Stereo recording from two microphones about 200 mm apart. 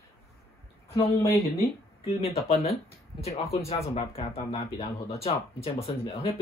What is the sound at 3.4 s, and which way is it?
Speech, 30° left (ahead or behind).